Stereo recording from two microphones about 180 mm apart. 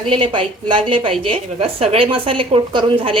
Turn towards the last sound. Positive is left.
turn(degrees=-30)  # may be behind; listen again after turning